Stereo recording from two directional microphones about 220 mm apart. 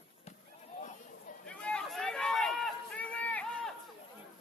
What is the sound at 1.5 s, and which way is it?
Run, 5° left (ahead or behind).